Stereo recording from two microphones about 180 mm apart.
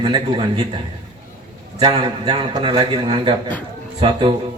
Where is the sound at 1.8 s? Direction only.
25° right (ahead or behind).